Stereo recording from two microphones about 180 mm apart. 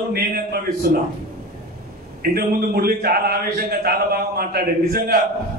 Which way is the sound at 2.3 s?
55° right (ahead or behind).